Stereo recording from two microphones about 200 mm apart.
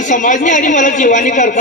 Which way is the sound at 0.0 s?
40° left (ahead or behind).